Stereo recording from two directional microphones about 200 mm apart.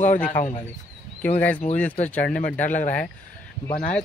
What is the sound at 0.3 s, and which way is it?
Speech, 40° left (ahead or behind).